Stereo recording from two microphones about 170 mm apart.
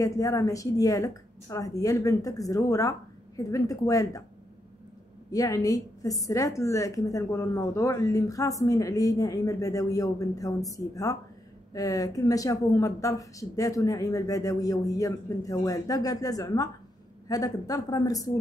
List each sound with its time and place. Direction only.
0.0 s a woman's voice: 20° left (ahead or behind)
5.3 s a woman's voice: 20° left (ahead or behind)